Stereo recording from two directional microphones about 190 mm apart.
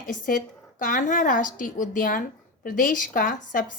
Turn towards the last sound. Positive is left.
turn(degrees=45)  # may be behind; listen again after turning